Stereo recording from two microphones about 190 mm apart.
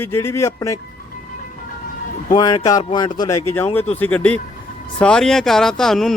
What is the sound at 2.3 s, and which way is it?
A man's voice, 20° left (ahead or behind).